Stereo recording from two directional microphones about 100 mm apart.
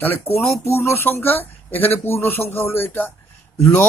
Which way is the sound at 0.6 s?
25° left (ahead or behind).